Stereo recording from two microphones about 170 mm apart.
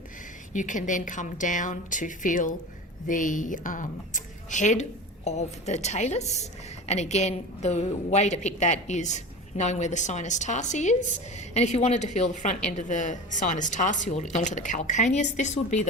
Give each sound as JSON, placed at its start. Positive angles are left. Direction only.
{"t": 0.5, "sound": "a woman's voice", "side_deg": 50}